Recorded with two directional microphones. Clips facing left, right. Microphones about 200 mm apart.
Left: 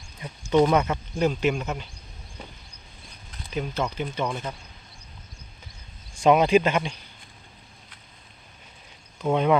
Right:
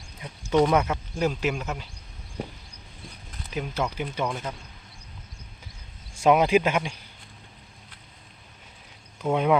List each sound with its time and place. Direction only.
0.5 s speech: centre (ahead or behind)
3.4 s speech: 5° right (ahead or behind)
6.2 s speech: 5° right (ahead or behind)
9.2 s speech: 5° right (ahead or behind)